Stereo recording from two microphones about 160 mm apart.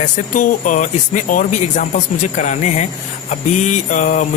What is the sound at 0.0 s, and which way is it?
Speech, 55° left (ahead or behind).